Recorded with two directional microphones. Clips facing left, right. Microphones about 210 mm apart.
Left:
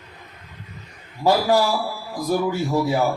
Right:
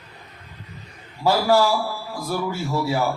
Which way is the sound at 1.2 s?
15° left (ahead or behind).